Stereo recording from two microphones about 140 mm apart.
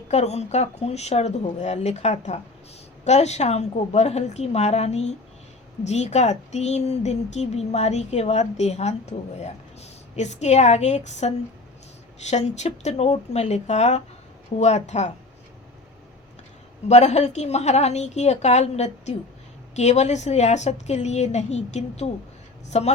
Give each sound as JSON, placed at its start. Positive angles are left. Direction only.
{"t": 0.1, "sound": "a woman's voice", "side_deg": 50}
{"t": 16.9, "sound": "a woman's voice", "side_deg": 55}